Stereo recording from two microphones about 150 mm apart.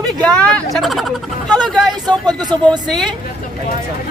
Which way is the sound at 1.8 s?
25° right (ahead or behind).